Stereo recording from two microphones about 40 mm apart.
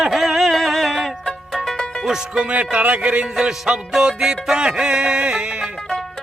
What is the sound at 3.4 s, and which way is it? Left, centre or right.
Music, centre.